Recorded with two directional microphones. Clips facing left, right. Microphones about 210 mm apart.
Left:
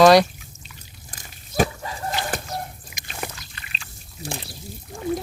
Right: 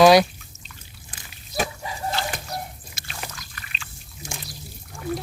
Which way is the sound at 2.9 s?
15° left (ahead or behind).